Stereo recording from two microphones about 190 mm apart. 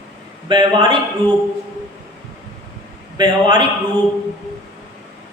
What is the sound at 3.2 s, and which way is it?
Speech, 25° right (ahead or behind).